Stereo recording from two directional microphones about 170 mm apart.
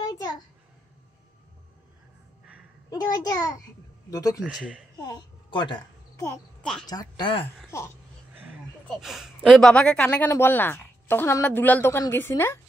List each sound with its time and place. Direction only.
2.9 s a child's voice: 25° left (ahead or behind)
4.4 s speech: 5° right (ahead or behind)
5.0 s a child's voice: 25° left (ahead or behind)
7.7 s speech: 15° left (ahead or behind)
8.8 s speech: centre (ahead or behind)